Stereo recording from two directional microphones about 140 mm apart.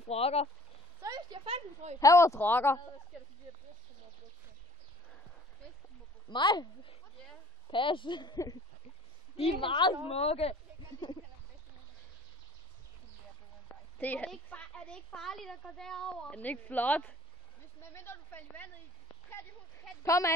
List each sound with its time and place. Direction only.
0.0 s speech: 45° left (ahead or behind)
1.0 s a sound: 30° right (ahead or behind)
1.4 s a woman's voice: 45° right (ahead or behind)
2.0 s speech: 25° left (ahead or behind)
6.3 s a woman's voice: 30° left (ahead or behind)
13.9 s a woman's voice: 10° left (ahead or behind)
20.0 s speech: 20° left (ahead or behind)